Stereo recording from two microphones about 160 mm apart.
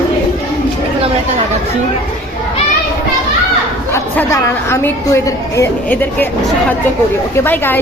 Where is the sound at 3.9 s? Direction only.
20° left (ahead or behind).